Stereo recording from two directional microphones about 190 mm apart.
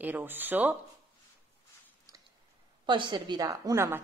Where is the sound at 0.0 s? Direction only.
10° right (ahead or behind).